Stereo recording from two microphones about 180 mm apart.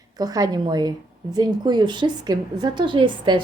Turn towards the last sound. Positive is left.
turn(degrees=-25)  # may be behind; listen again after turning